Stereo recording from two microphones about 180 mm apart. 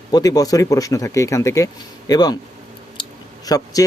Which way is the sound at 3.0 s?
25° left (ahead or behind).